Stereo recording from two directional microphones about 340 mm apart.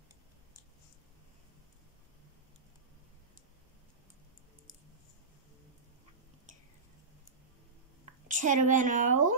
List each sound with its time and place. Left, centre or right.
8.0 s speech: right